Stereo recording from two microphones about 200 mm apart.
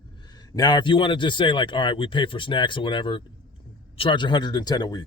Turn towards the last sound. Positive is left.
turn(degrees=20)  # may be behind; listen again after turning